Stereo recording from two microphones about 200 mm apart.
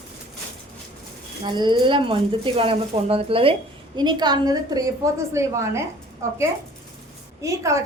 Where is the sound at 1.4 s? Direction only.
25° right (ahead or behind).